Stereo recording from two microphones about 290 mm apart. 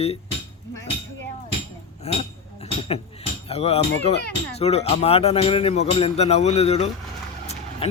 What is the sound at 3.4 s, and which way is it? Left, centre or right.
Music, left.